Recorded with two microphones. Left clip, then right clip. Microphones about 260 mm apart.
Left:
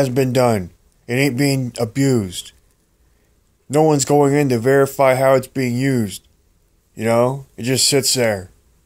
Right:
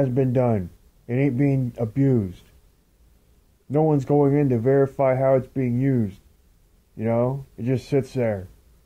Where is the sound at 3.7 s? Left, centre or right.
Centre.